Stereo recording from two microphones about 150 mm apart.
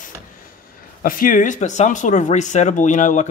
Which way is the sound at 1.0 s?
65° left (ahead or behind).